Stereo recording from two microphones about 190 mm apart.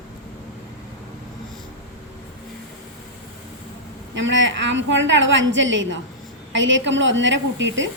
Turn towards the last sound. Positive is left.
turn(degrees=-75)  # may be behind; listen again after turning